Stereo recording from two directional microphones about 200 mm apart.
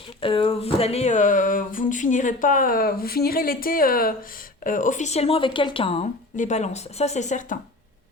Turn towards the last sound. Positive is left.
turn(degrees=40)  # may be behind; listen again after turning